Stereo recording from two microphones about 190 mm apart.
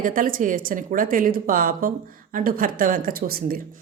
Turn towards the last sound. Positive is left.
turn(degrees=-50)  # may be behind; listen again after turning